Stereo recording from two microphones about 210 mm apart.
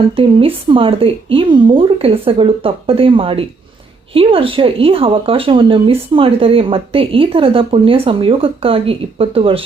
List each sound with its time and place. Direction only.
0.2 s speech: 25° right (ahead or behind)